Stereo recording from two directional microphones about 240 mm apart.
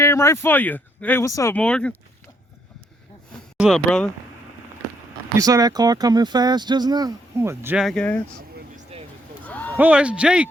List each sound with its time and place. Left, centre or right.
0.0 s speech: centre
3.6 s speech: centre
5.4 s speech: centre
8.7 s vehicle: right
9.5 s a sound: centre
9.7 s speech: centre